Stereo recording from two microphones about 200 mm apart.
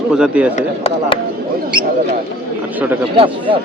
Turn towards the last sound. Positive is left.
turn(degrees=-25)  # may be behind; listen again after turning